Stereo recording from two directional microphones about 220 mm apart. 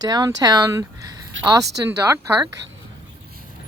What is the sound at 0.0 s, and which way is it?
Speech, 15° right (ahead or behind).